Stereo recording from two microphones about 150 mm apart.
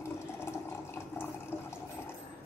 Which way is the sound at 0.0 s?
15° left (ahead or behind).